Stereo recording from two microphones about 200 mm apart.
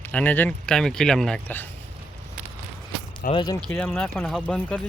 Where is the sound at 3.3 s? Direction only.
20° left (ahead or behind).